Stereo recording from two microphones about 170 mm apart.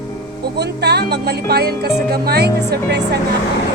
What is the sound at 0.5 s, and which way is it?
Music, 75° right (ahead or behind).